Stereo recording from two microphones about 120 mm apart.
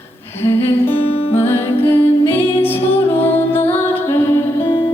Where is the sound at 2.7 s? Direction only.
55° left (ahead or behind).